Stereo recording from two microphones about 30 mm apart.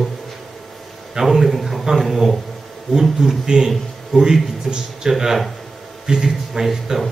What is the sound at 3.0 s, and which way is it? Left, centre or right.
A man's voice, centre.